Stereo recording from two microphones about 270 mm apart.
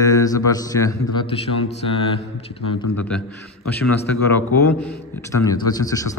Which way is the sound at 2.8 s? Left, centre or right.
Left.